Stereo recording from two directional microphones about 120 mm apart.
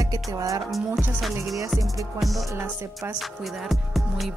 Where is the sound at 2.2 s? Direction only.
Centre (ahead or behind).